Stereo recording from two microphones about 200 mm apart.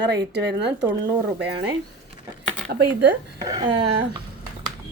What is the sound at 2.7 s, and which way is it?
Speech, 45° right (ahead or behind).